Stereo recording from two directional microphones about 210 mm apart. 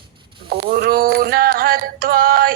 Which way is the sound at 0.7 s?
45° right (ahead or behind).